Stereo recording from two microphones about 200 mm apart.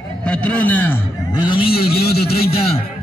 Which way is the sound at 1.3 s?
20° left (ahead or behind).